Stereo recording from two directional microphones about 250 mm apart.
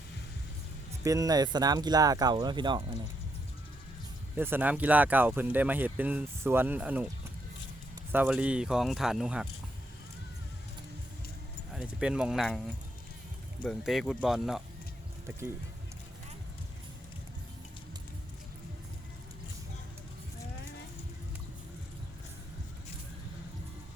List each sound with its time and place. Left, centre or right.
1.0 s speech: centre
4.4 s speech: centre
8.1 s speech: centre
11.7 s speech: centre